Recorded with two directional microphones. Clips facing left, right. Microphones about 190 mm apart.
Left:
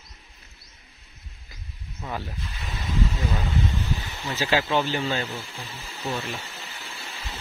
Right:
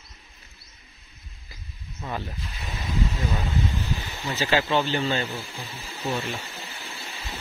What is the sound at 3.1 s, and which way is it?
Speech, 5° right (ahead or behind).